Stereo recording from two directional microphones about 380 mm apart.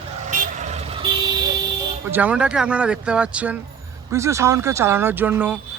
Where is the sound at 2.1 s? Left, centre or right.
Centre.